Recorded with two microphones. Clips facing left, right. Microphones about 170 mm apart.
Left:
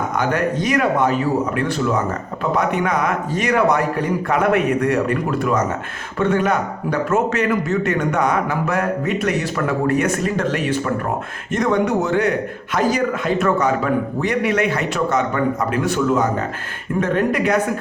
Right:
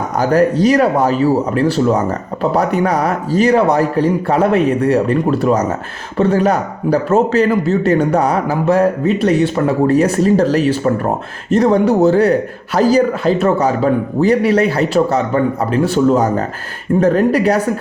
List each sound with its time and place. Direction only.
0.2 s speech: 35° right (ahead or behind)